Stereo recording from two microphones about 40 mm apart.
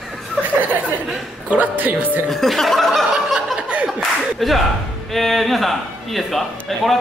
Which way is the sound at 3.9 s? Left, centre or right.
Centre.